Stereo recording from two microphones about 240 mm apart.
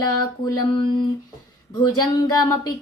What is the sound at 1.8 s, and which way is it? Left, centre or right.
Speech, centre.